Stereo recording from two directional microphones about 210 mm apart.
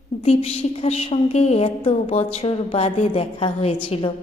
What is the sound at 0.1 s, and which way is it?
A woman's voice, 30° left (ahead or behind).